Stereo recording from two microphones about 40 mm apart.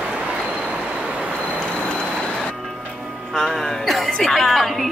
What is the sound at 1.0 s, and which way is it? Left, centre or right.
Vehicle, right.